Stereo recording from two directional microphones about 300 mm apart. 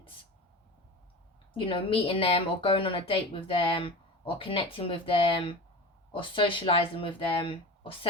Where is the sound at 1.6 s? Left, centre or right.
Centre.